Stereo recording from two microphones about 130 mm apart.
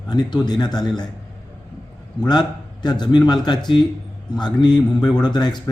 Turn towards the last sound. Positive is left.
turn(degrees=35)  # may be behind; listen again after turning